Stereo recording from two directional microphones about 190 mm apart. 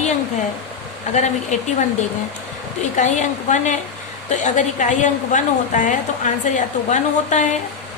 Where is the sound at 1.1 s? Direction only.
40° left (ahead or behind).